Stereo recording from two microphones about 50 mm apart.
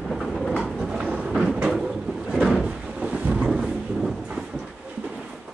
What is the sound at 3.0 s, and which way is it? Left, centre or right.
Thunder, right.